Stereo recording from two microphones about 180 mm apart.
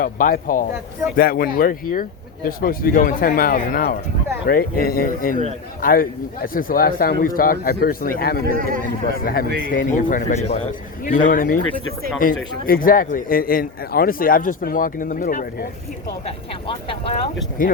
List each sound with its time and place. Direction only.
0.0 s a man's voice: 50° left (ahead or behind)
8.4 s a man's voice: 50° right (ahead or behind)
9.2 s a man's voice: 55° left (ahead or behind)
12.6 s speech: 50° left (ahead or behind)